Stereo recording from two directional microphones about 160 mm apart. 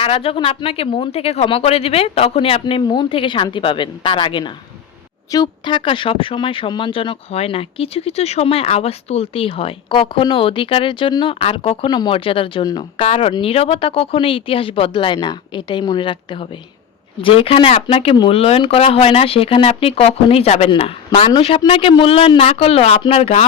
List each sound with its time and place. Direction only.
0.0 s speech: 35° left (ahead or behind)